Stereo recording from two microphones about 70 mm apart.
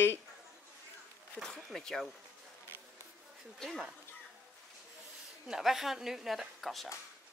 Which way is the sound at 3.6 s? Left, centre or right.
Centre.